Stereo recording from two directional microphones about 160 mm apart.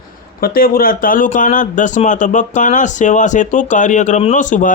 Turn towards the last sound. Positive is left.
turn(degrees=50)  # may be behind; listen again after turning